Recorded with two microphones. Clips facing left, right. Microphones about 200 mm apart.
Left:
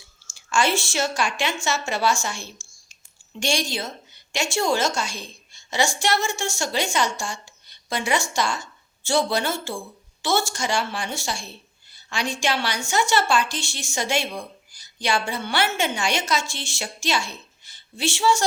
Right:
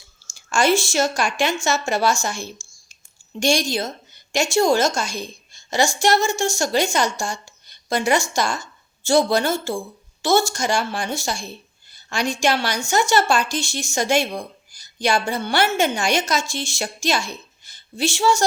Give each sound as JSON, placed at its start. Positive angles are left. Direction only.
{"t": 0.3, "sound": "a woman's voice", "side_deg": -40}